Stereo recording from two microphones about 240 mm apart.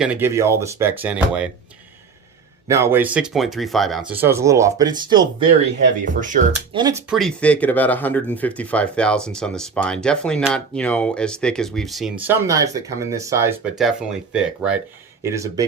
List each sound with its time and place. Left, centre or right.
0.0 s speech: centre
2.6 s speech: centre
6.1 s speech: right
6.7 s speech: centre
7.1 s speech: centre
13.7 s speech: centre